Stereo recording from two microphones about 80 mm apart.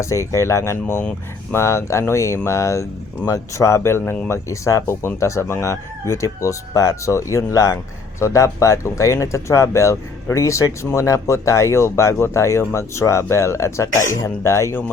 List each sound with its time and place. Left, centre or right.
0.0 s speech: left